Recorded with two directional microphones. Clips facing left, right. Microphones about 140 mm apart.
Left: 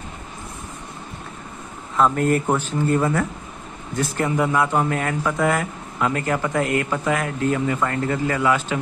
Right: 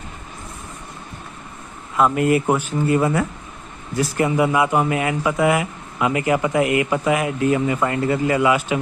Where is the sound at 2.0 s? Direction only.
10° right (ahead or behind).